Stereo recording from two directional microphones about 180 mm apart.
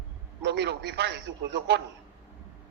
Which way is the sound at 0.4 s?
70° right (ahead or behind).